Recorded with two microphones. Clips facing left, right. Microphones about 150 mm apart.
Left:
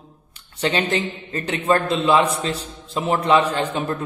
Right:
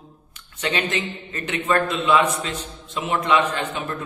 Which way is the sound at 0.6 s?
30° left (ahead or behind).